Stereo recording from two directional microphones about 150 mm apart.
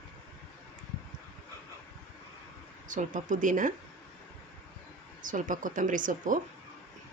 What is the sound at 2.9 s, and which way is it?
Speech, 60° right (ahead or behind).